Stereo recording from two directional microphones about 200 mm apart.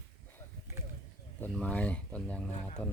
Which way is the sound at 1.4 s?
5° left (ahead or behind).